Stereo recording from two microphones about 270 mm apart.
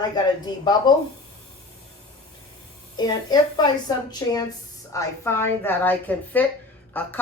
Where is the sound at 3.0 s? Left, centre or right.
Centre.